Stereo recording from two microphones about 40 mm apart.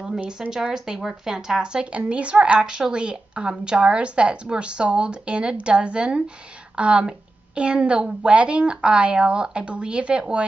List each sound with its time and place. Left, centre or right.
0.3 s a woman's voice: centre
2.6 s a woman's voice: centre